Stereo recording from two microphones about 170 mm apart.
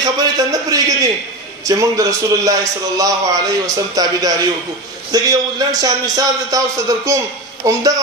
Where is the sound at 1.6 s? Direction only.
20° right (ahead or behind).